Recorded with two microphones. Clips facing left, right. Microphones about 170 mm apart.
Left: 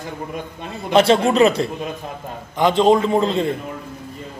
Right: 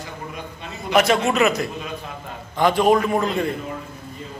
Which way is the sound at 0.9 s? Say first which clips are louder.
Left 4 dB; 30° left (ahead or behind).